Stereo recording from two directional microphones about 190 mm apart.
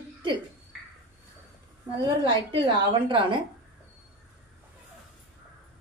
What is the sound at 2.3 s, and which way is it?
A woman's voice, 25° right (ahead or behind).